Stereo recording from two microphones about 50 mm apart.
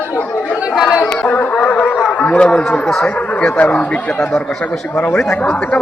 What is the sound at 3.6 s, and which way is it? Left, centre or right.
Speech, left.